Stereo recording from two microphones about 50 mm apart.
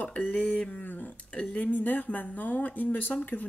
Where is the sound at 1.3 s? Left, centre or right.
Left.